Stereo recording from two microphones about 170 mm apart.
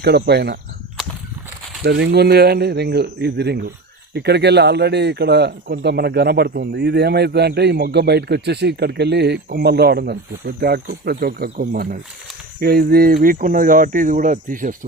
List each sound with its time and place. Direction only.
0.0 s a man's voice: 75° right (ahead or behind)
1.8 s a man's voice: 70° right (ahead or behind); by 14.8 s 50° right (ahead or behind)